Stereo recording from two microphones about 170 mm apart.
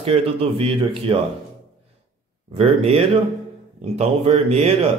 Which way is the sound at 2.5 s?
35° right (ahead or behind).